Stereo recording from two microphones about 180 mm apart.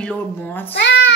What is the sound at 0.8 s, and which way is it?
Speech, 85° left.